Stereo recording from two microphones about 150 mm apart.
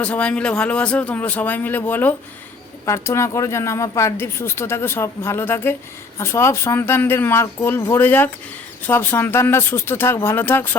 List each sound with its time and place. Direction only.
0.0 s speech: 10° left (ahead or behind)